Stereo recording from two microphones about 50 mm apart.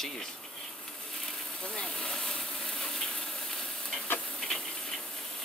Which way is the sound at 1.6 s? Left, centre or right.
Centre.